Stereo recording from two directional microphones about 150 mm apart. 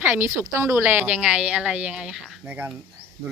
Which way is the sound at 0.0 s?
15° right (ahead or behind).